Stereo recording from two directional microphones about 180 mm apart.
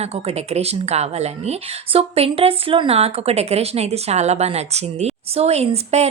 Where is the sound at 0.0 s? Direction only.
35° right (ahead or behind).